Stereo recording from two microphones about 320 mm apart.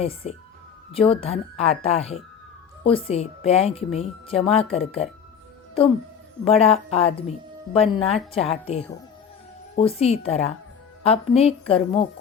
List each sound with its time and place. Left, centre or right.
0.0 s speech: centre
6.6 s speech: centre